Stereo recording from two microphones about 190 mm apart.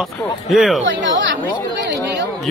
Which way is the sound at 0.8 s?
75° right (ahead or behind).